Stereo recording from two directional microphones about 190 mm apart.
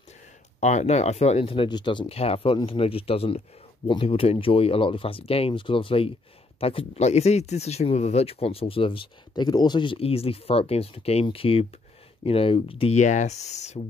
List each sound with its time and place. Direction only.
0.6 s speech: 40° left (ahead or behind)